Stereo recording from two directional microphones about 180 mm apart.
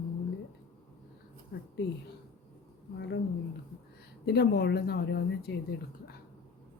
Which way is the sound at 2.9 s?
75° left (ahead or behind).